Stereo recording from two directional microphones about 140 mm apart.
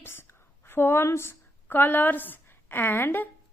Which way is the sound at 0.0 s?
15° left (ahead or behind).